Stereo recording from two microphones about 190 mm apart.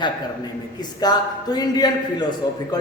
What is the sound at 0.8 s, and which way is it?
A man's voice, 20° left (ahead or behind).